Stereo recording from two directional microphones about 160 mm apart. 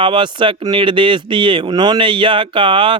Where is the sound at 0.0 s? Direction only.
30° right (ahead or behind).